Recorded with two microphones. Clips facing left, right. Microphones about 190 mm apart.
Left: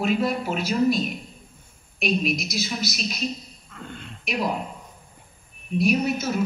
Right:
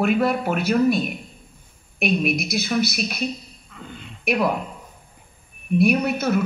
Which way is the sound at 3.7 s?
Centre (ahead or behind).